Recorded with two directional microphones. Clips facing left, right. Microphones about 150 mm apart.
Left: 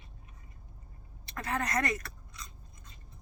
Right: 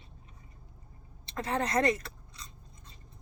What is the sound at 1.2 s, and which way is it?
Toothbrush, 25° right (ahead or behind).